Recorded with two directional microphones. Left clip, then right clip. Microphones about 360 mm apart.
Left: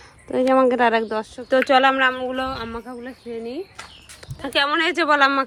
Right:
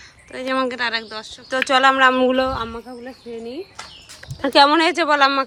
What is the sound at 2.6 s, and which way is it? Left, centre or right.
Speech, centre.